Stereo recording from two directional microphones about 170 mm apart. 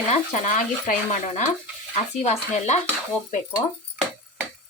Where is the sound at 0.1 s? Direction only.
45° left (ahead or behind).